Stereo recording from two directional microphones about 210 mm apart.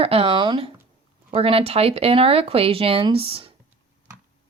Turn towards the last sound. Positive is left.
turn(degrees=-25)  # may be behind; listen again after turning